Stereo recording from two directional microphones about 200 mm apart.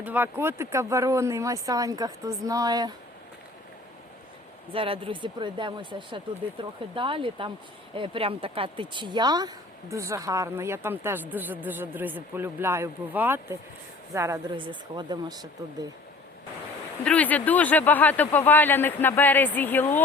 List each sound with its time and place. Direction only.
0.0 s speech: 10° right (ahead or behind)
4.7 s speech: 25° right (ahead or behind)
17.0 s speech: 5° left (ahead or behind)